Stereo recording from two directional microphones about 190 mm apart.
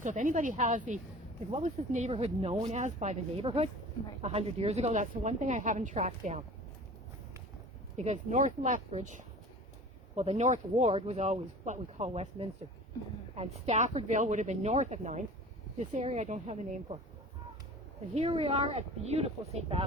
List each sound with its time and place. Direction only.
0.0 s speech: 40° right (ahead or behind)
7.9 s speech: 35° right (ahead or behind)
18.1 s speech: 35° right (ahead or behind)